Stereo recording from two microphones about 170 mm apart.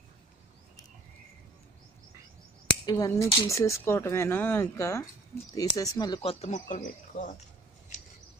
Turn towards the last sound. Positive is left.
turn(degrees=50)  # may be behind; listen again after turning